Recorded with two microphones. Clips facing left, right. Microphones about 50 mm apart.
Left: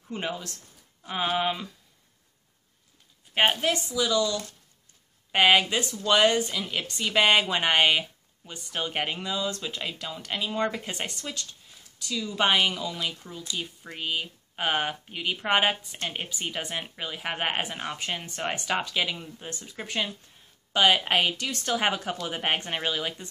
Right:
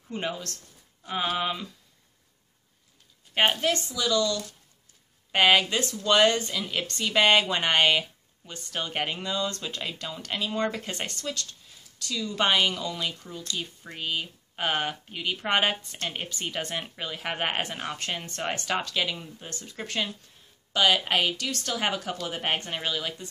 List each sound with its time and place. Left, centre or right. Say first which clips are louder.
0.1 s speech: even; centre
3.3 s a woman's voice: even; centre
20.7 s speech: left 1 dB; centre